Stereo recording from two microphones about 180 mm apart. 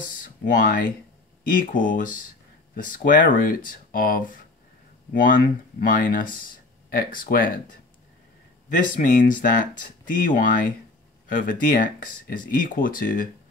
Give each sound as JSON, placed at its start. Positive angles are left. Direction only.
{"t": 0.2, "sound": "speech", "side_deg": 45}
{"t": 8.6, "sound": "speech", "side_deg": 50}